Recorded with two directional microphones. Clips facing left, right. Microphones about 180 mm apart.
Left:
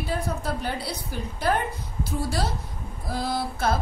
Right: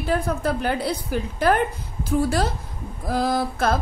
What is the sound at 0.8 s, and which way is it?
Speech, 90° right.